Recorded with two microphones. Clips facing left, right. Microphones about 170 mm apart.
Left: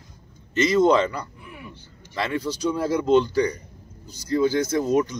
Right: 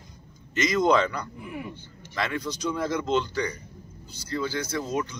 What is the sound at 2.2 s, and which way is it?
A man's voice, 30° left (ahead or behind).